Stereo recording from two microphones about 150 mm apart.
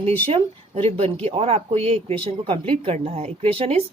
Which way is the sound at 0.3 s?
40° right (ahead or behind).